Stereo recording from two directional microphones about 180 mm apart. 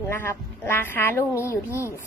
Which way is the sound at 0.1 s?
15° left (ahead or behind).